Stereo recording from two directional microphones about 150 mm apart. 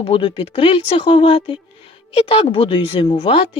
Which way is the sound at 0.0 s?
35° left (ahead or behind).